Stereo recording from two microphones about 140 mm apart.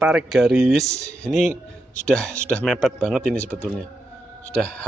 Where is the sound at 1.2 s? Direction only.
Centre (ahead or behind).